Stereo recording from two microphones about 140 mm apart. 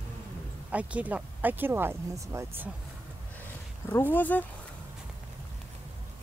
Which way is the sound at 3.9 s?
15° left (ahead or behind).